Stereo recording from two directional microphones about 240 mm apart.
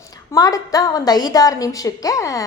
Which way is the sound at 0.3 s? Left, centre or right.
Centre.